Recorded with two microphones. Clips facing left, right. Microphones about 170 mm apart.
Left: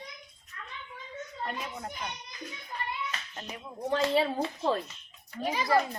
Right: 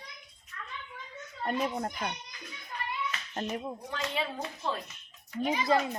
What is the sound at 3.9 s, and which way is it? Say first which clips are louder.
Speech: left 9 dB; 35° left (ahead or behind).